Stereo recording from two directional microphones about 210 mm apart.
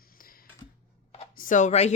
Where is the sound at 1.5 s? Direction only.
35° left (ahead or behind).